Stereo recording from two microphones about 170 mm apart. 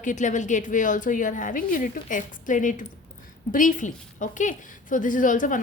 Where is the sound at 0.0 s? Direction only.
45° left (ahead or behind).